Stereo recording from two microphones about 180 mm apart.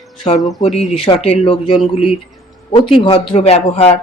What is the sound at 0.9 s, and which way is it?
Speech, 30° left (ahead or behind).